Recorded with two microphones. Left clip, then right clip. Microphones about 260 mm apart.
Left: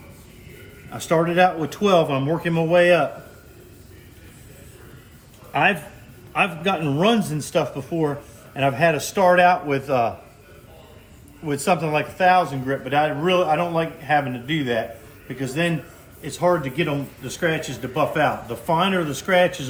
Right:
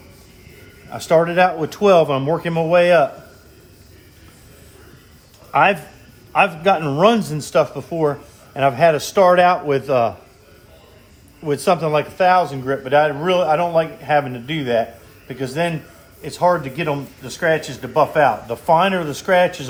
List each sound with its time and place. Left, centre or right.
0.9 s speech: right
5.5 s speech: right
11.4 s speech: right